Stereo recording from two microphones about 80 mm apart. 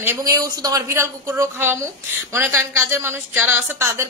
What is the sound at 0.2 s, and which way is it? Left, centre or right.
A woman's voice, right.